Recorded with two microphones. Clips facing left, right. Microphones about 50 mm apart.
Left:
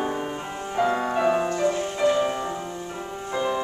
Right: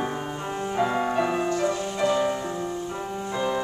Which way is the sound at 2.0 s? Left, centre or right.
Left.